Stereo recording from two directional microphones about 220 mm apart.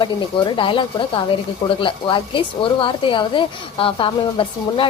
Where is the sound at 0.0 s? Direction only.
20° left (ahead or behind).